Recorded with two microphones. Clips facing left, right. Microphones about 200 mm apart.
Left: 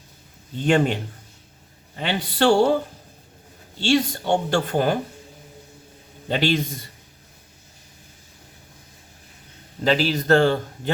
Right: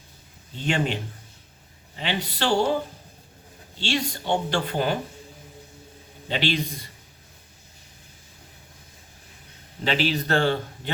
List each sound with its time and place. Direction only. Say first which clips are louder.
0.6 s a woman's voice: left 6 dB; 50° left (ahead or behind)
2.0 s a woman's voice: left 6 dB; 50° left (ahead or behind)
3.8 s a woman's voice: left 6 dB; 45° left (ahead or behind)
6.2 s a woman's voice: left 4 dB; 45° left (ahead or behind)
9.8 s a woman's voice: left 4 dB; 40° left (ahead or behind)